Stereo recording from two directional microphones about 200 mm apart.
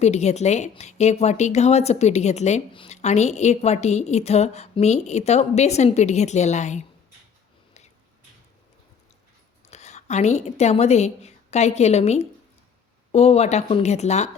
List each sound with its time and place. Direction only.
0.0 s speech: 35° left (ahead or behind)
9.6 s a woman's voice: 35° left (ahead or behind)